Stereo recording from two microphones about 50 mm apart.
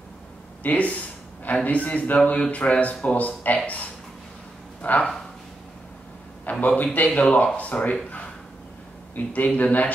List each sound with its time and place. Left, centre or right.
0.7 s a man's voice: left
6.6 s a man's voice: left
9.1 s a man's voice: left